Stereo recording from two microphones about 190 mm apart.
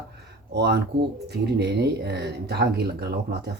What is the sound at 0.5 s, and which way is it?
Speech, 60° right (ahead or behind).